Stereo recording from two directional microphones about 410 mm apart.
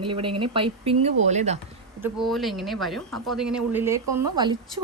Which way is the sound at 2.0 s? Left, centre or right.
Centre.